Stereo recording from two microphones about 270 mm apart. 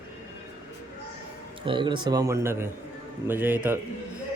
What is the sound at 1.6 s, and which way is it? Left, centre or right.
Speech, centre.